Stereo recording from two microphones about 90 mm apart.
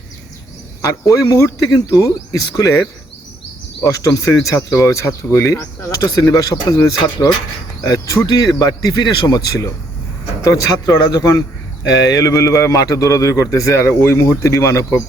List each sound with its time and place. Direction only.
0.8 s a man's voice: 35° left (ahead or behind)
3.8 s a man's voice: 40° left (ahead or behind)
5.9 s a man's voice: 45° left (ahead or behind)
8.3 s a man's voice: 45° left (ahead or behind)